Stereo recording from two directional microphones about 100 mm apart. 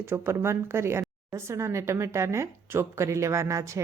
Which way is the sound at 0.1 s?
25° right (ahead or behind).